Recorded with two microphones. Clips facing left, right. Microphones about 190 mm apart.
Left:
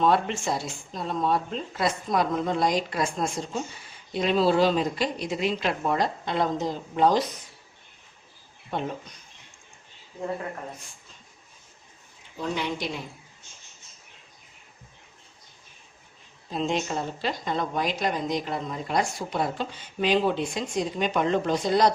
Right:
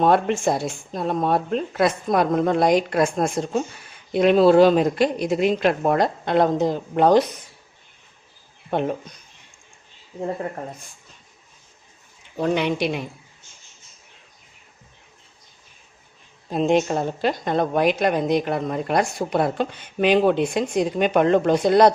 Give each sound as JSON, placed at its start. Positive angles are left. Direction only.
{"t": 0.0, "sound": "a woman's voice", "side_deg": -55}
{"t": 12.4, "sound": "a woman's voice", "side_deg": -65}
{"t": 16.5, "sound": "a woman's voice", "side_deg": -55}